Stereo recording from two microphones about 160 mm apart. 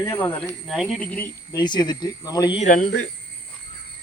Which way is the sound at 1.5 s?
25° left (ahead or behind).